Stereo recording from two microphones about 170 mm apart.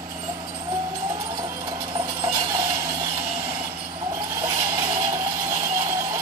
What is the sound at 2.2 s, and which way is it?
Train, 15° right (ahead or behind).